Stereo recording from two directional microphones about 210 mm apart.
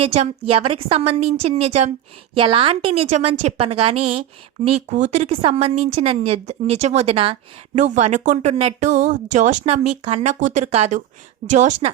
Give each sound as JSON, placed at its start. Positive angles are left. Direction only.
{"t": 0.0, "sound": "a woman's voice", "side_deg": -30}